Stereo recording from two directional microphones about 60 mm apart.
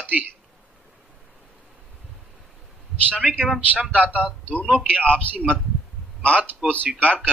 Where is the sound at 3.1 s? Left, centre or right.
Right.